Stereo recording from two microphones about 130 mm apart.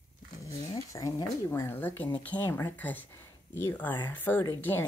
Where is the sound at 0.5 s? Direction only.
25° left (ahead or behind).